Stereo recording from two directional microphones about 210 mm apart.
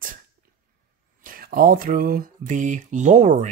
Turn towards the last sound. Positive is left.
turn(degrees=-35)  # may be behind; listen again after turning